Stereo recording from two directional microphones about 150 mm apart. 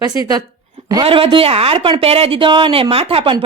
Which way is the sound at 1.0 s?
35° right (ahead or behind).